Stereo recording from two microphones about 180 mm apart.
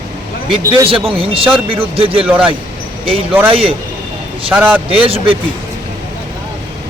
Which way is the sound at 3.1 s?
30° right (ahead or behind).